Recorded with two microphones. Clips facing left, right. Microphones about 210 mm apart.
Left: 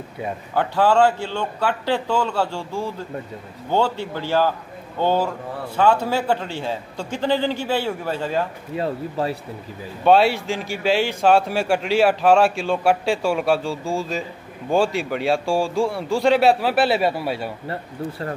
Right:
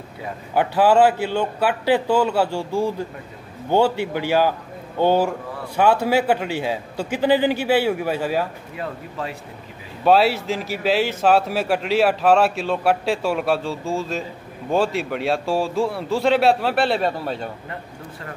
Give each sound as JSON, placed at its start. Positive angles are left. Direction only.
{"t": 0.6, "sound": "a man's voice", "side_deg": -10}
{"t": 8.7, "sound": "speech", "side_deg": 30}
{"t": 10.0, "sound": "a man's voice", "side_deg": 0}